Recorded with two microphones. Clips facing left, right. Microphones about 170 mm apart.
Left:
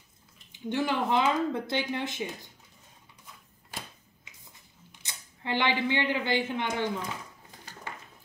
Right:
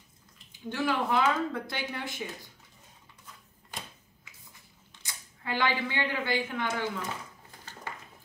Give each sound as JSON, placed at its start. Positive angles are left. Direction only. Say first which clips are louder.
{"t": 0.5, "sound": "speech", "louder": "left 1 dB", "side_deg": 20}
{"t": 4.9, "sound": "speech", "louder": "right 1 dB", "side_deg": 20}
{"t": 7.7, "sound": "a sound", "louder": "even", "side_deg": 10}